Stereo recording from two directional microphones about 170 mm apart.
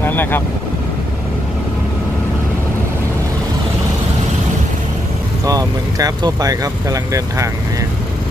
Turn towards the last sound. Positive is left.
turn(degrees=-20)  # may be behind; listen again after turning